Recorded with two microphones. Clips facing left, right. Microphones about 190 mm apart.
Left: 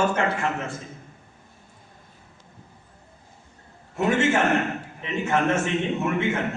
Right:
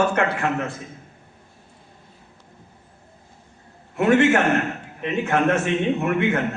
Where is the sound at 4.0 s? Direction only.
60° right (ahead or behind).